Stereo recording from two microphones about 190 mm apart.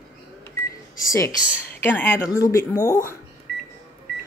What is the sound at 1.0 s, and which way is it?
A woman's voice, 15° left (ahead or behind).